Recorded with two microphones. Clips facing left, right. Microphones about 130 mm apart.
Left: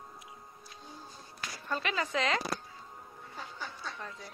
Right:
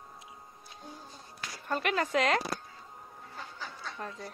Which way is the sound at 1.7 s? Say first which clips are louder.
Right 4 dB; 55° right (ahead or behind).